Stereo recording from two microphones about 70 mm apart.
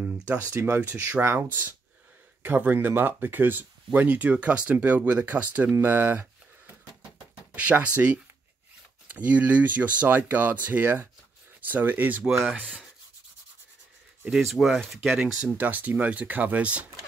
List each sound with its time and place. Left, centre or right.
0.0 s speech: right
1.2 s speech: right
7.5 s speech: right
14.4 s speech: centre
15.1 s speech: centre